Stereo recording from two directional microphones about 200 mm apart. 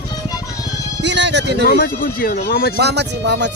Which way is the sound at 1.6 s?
45° left (ahead or behind).